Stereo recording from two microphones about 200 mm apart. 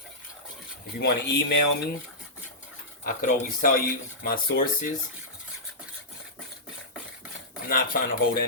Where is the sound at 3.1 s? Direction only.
40° left (ahead or behind).